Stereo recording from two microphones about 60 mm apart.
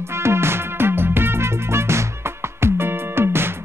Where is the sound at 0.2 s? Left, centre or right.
Right.